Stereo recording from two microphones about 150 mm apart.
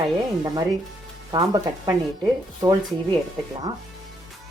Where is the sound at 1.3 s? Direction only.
25° right (ahead or behind).